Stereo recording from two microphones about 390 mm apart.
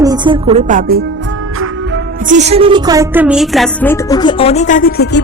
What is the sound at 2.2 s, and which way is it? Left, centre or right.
Speech, centre.